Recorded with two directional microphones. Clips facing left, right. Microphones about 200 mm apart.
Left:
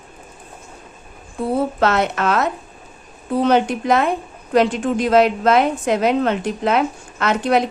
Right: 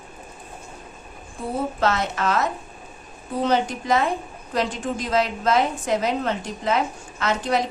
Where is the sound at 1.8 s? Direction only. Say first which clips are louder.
Left 5 dB; 65° left (ahead or behind).